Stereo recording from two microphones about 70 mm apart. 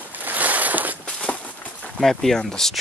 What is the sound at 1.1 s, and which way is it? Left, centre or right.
Walk, centre.